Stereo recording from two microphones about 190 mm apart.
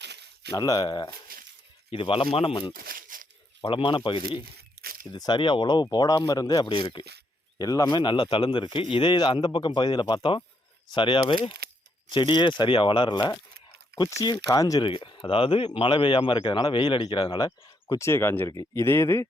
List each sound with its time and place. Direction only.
0.0 s a sound: 65° right (ahead or behind)
0.5 s speech: 20° left (ahead or behind)
1.3 s a sound: 50° right (ahead or behind)
1.9 s speech: 30° left (ahead or behind)
2.7 s tearing: 50° right (ahead or behind)
3.6 s speech: 25° left (ahead or behind)
4.8 s tearing: 50° right (ahead or behind)
5.1 s speech: 20° left (ahead or behind)
11.6 s a sound: 55° right (ahead or behind)
12.1 s speech: 25° left (ahead or behind)